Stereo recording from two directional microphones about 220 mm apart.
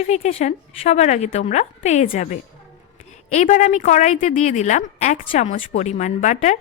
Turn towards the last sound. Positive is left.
turn(degrees=30)  # may be behind; listen again after turning